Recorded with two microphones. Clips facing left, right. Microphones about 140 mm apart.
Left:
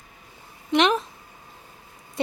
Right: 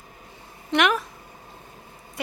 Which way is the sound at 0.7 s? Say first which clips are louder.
Left 2 dB; 25° left (ahead or behind).